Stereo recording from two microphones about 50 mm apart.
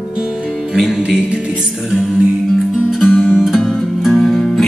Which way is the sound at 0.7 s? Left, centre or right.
Centre.